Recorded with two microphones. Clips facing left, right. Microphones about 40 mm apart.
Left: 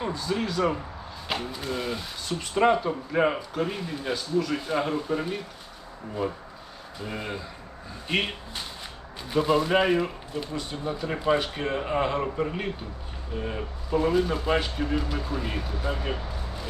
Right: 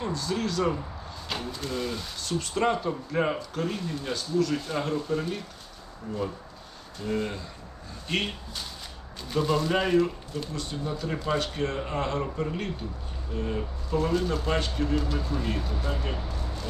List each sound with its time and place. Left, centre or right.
0.0 s speech: centre
7.0 s speech: centre